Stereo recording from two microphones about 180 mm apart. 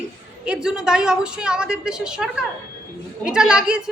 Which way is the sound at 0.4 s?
5° right (ahead or behind).